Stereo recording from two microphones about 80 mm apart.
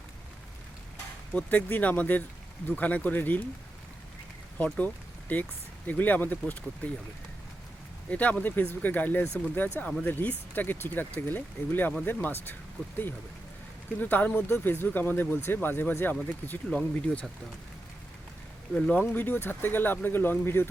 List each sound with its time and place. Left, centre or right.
1.3 s speech: centre
4.5 s speech: centre
8.1 s speech: centre
14.0 s speech: left
18.7 s speech: centre